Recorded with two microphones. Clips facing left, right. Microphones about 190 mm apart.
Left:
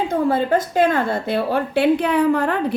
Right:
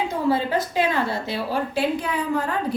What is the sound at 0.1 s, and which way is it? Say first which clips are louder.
A woman's voice: left 5 dB; 50° left (ahead or behind).